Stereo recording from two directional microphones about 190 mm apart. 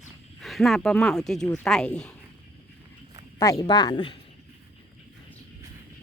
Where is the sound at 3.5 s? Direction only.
20° left (ahead or behind).